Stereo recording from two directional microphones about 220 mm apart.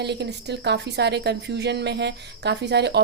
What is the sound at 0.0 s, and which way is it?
A woman's voice, 50° right (ahead or behind).